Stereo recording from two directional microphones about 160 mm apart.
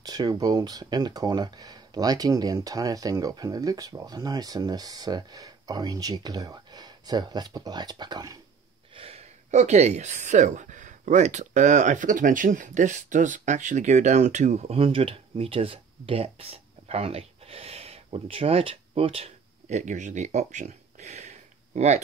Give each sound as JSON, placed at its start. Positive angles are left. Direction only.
{"t": 0.0, "sound": "speech", "side_deg": -25}
{"t": 8.9, "sound": "speech", "side_deg": -35}